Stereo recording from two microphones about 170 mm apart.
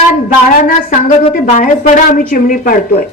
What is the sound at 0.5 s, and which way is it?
A woman's voice, 55° left (ahead or behind).